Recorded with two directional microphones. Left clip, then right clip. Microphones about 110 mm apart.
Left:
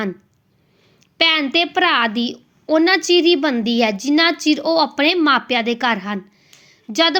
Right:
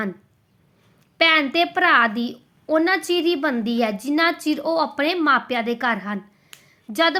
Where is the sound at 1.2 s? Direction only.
15° left (ahead or behind).